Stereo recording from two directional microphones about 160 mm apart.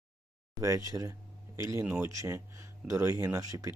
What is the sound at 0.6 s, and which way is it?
Speech, 20° right (ahead or behind).